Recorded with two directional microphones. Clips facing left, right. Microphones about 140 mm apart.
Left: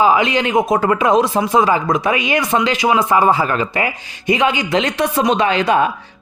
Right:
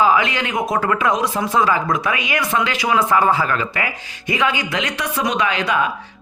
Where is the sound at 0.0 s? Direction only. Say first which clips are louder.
Left 3 dB; 20° left (ahead or behind).